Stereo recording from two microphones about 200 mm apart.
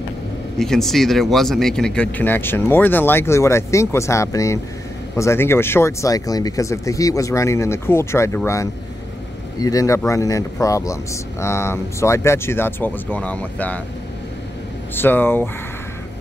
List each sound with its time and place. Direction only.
0.6 s speech: centre (ahead or behind)
15.0 s speech: 10° left (ahead or behind)